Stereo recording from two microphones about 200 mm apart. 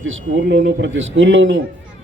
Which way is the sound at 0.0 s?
70° right (ahead or behind).